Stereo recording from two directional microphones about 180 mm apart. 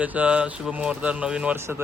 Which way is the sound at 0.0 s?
10° right (ahead or behind).